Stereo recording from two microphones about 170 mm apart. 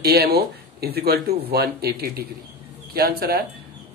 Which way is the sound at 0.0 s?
70° right (ahead or behind).